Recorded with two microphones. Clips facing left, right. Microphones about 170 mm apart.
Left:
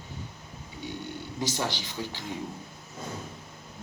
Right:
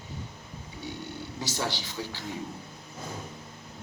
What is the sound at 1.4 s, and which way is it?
Speech, 15° left (ahead or behind).